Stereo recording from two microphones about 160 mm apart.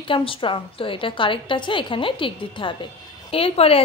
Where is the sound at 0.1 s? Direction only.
35° left (ahead or behind).